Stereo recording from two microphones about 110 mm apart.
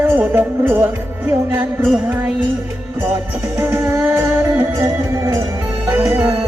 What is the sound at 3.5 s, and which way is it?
Music, 25° right (ahead or behind).